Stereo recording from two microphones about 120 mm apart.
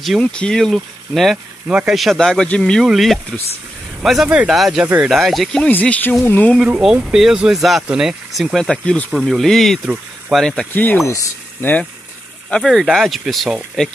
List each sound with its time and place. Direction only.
0.0 s speech: 5° left (ahead or behind)
5.7 s speech: 15° left (ahead or behind)
6.7 s speech: 5° right (ahead or behind)
10.7 s speech: 15° left (ahead or behind)
12.4 s speech: 5° left (ahead or behind)